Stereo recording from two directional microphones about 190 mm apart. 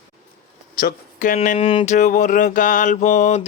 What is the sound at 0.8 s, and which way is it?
Speech, 45° left (ahead or behind).